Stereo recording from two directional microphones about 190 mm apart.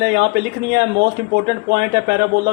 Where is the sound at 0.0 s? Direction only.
60° right (ahead or behind).